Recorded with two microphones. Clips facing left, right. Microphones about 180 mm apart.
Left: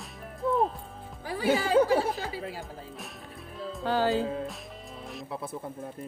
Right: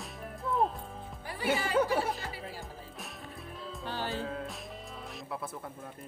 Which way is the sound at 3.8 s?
90° left.